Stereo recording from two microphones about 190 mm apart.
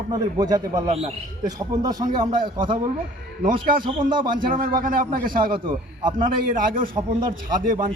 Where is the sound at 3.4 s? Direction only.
50° right (ahead or behind).